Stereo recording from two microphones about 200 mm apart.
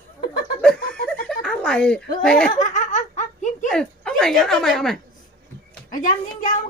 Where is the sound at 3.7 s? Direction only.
5° left (ahead or behind).